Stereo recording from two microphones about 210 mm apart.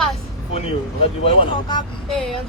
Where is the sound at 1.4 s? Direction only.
20° left (ahead or behind).